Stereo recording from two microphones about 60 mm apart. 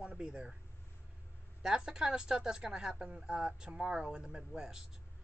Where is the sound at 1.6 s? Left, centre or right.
Centre.